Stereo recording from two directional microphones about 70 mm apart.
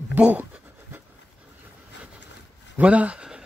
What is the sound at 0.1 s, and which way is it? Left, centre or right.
Speech, right.